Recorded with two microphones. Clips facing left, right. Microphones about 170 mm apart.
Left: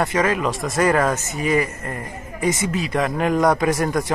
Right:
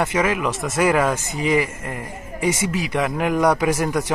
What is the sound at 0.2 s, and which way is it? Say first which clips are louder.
A man's voice: left 1 dB; 10° right (ahead or behind).